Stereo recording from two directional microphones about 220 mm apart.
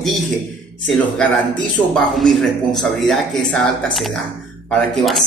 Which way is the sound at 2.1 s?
Centre (ahead or behind).